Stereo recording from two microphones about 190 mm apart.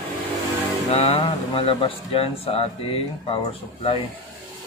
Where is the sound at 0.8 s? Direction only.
30° left (ahead or behind).